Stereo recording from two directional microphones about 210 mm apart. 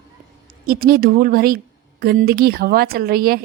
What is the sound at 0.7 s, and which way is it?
A woman's voice, 45° right (ahead or behind).